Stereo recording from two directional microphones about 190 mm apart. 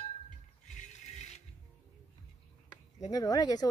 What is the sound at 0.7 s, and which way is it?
Mechanisms, 35° left (ahead or behind).